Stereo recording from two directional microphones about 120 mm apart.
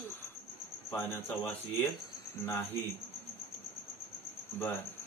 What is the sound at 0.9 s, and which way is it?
A man's voice, 20° left (ahead or behind).